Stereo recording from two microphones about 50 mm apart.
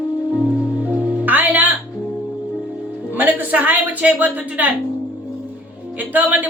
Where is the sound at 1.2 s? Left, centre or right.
Right.